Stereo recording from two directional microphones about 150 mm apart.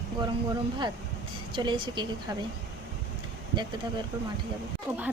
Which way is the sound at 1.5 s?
30° right (ahead or behind).